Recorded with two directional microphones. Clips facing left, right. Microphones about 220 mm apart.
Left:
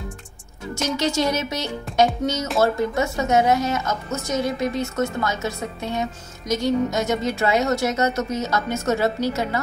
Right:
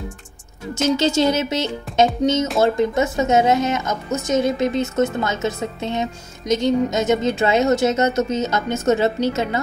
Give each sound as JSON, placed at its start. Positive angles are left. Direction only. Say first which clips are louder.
{"t": 0.9, "sound": "a woman's voice", "louder": "right 3 dB", "side_deg": -25}
{"t": 2.2, "sound": "a woman's voice", "louder": "right 4 dB", "side_deg": -15}